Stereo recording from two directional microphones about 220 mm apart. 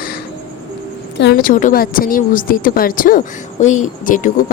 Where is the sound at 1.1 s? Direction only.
50° left (ahead or behind).